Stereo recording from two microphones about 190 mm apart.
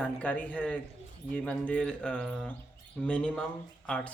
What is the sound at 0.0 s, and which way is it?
Speech, 5° left (ahead or behind).